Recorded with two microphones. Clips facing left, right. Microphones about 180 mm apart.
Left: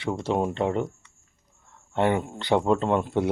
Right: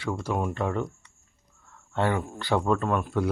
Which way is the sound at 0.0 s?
25° left (ahead or behind).